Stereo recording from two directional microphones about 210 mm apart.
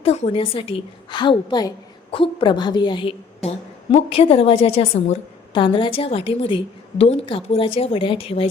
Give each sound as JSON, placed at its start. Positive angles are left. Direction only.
{"t": 0.0, "sound": "a woman's voice", "side_deg": 30}